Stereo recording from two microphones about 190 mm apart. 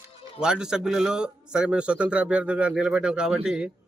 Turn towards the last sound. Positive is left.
turn(degrees=-5)  # may be behind; listen again after turning